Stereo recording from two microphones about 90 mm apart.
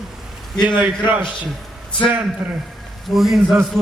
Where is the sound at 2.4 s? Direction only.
25° right (ahead or behind).